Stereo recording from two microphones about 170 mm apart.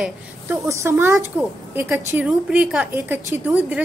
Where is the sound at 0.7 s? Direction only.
15° right (ahead or behind).